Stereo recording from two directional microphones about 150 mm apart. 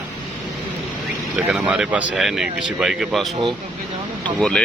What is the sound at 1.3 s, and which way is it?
Speech, 5° right (ahead or behind).